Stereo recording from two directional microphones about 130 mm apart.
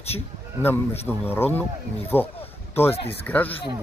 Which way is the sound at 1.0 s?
15° left (ahead or behind).